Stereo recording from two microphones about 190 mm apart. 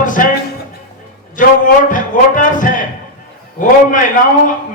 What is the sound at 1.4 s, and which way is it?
A man's voice, 45° left (ahead or behind).